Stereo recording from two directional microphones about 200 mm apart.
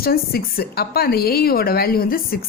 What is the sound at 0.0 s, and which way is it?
A woman's voice, 50° left (ahead or behind).